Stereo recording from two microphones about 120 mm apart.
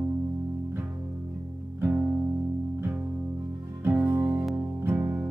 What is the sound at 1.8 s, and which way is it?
Music, 10° right (ahead or behind).